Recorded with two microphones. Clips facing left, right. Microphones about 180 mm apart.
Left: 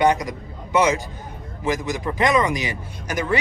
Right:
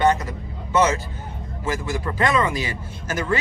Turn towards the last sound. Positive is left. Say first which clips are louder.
# left 1 dB
turn(degrees=15)  # may be behind; listen again after turning